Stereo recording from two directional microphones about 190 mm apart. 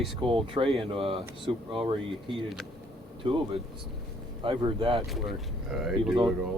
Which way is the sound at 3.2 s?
30° right (ahead or behind).